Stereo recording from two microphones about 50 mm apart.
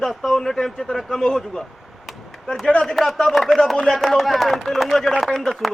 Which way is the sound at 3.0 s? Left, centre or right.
Centre.